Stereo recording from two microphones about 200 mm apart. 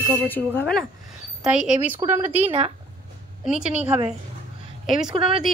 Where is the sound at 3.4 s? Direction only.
5° right (ahead or behind).